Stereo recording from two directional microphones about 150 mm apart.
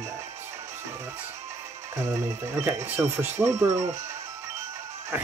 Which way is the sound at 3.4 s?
20° right (ahead or behind).